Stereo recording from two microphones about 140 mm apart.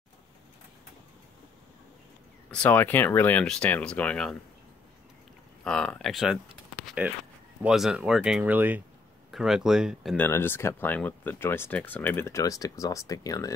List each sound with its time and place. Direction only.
2.5 s speech: 10° left (ahead or behind)
5.6 s speech: 5° left (ahead or behind)
7.6 s speech: 5° right (ahead or behind)
10.1 s speech: 15° left (ahead or behind)